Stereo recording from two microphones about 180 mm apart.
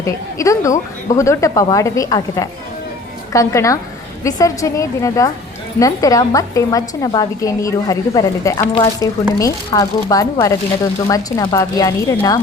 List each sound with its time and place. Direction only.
0.0 s a woman's voice: 15° left (ahead or behind)